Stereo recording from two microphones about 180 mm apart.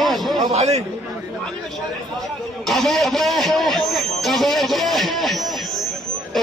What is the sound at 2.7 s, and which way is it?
Speech, centre (ahead or behind).